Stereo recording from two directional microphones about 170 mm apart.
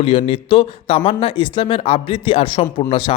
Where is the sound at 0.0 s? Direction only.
35° left (ahead or behind).